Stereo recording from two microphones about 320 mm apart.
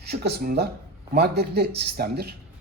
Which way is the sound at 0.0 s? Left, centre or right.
Right.